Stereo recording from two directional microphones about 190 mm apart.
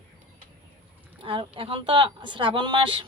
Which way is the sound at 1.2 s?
30° right (ahead or behind).